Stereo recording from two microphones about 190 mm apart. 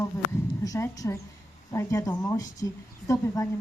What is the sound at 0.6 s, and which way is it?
A woman's voice, 20° left (ahead or behind).